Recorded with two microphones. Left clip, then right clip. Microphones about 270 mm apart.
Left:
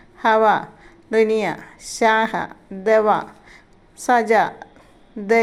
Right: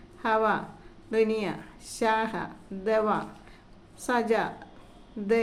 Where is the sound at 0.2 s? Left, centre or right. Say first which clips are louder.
Left 10 dB; left.